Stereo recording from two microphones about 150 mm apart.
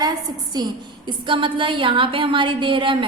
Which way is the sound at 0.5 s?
30° right (ahead or behind).